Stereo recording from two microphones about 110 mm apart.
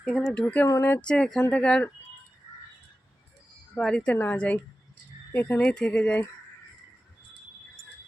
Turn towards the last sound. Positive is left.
turn(degrees=10)  # may be behind; listen again after turning